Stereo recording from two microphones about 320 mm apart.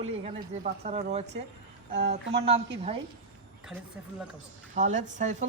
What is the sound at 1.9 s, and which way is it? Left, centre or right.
Speech, right.